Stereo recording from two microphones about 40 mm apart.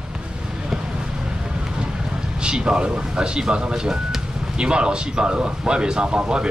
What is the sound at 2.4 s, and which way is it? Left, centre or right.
Speech, right.